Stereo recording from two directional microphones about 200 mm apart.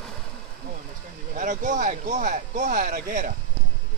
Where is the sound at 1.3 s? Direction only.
35° right (ahead or behind).